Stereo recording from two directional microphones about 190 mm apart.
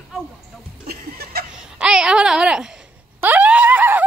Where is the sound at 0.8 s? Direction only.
55° right (ahead or behind).